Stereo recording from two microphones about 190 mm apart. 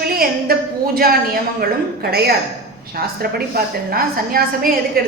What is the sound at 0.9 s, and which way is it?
A woman's voice, 50° right (ahead or behind).